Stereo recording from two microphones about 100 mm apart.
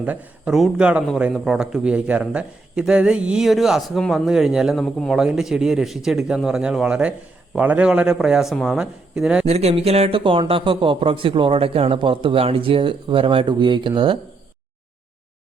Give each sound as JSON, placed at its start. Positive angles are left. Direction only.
{"t": 0.0, "sound": "a man's voice", "side_deg": -15}
{"t": 9.5, "sound": "speech", "side_deg": -90}